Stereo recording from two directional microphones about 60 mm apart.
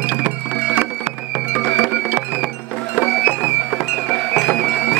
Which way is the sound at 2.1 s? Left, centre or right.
Right.